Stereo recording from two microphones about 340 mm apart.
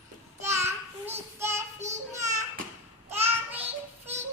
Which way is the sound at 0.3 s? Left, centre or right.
Centre.